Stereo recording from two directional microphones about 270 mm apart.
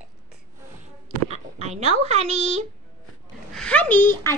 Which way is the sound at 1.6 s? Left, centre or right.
Right.